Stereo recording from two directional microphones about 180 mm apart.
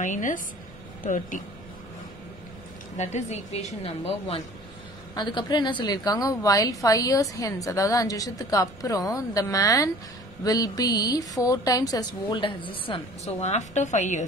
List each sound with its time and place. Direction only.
0.0 s speech: 45° left (ahead or behind)
3.0 s a woman's voice: 40° left (ahead or behind)
5.1 s a woman's voice: 25° left (ahead or behind); by 14.2 s 40° left (ahead or behind)